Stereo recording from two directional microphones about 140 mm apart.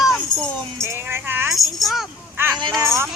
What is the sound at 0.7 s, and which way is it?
Speech, 20° right (ahead or behind).